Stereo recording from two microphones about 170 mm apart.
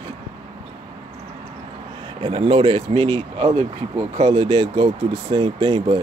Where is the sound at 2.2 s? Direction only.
30° right (ahead or behind).